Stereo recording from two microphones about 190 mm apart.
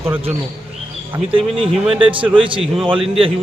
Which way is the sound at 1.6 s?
30° right (ahead or behind).